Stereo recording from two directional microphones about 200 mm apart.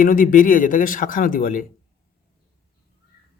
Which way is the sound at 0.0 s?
45° left (ahead or behind).